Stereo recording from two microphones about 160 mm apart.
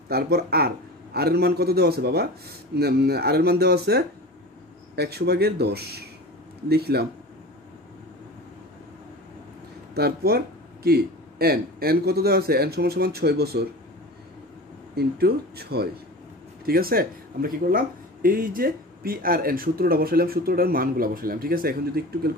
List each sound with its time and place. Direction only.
0.1 s a man's voice: 80° right
9.9 s speech: 75° right (ahead or behind)
15.0 s a man's voice: 80° right
16.6 s speech: 70° right (ahead or behind)